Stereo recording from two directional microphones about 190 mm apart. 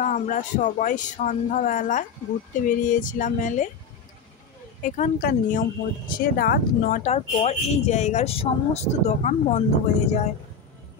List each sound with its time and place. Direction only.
0.0 s speech: 40° left (ahead or behind)
4.8 s speech: 40° left (ahead or behind)
7.0 s speech: 35° left (ahead or behind)